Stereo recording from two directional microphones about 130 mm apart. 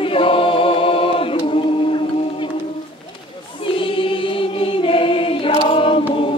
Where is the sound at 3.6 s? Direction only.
40° left (ahead or behind).